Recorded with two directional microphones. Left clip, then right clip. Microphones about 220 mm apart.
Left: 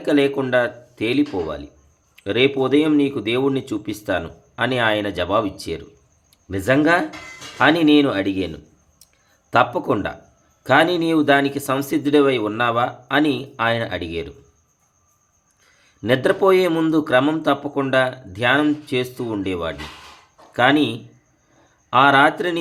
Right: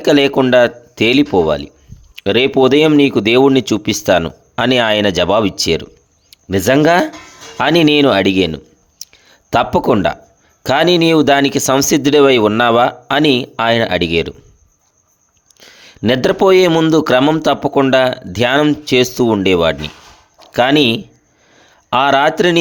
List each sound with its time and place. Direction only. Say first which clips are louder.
0.0 s speech: right 7 dB; 45° right (ahead or behind)
15.6 s speech: right 8 dB; 45° right (ahead or behind)